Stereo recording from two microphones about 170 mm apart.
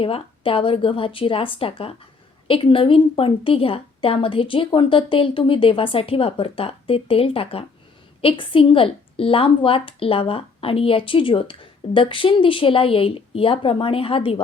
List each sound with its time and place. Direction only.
0.0 s a woman's voice: 30° left (ahead or behind)